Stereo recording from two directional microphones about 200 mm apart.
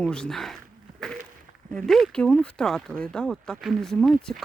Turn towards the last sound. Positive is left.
turn(degrees=0)  # may be behind; listen again after turning